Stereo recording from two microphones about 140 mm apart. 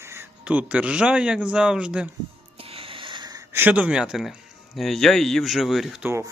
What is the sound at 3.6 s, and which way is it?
Speech, 10° right (ahead or behind).